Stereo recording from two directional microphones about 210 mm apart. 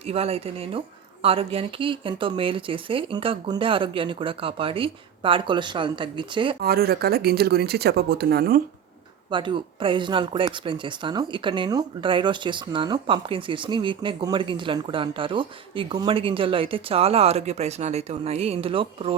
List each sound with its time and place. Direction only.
0.0 s speech: 30° right (ahead or behind)
6.6 s speech: 45° right (ahead or behind)
9.3 s speech: 25° right (ahead or behind)